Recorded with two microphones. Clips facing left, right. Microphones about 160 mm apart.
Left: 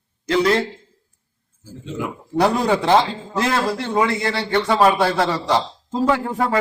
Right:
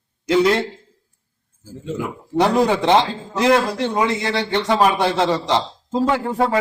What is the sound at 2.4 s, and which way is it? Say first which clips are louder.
A man's voice: right 1 dB; 20° right (ahead or behind).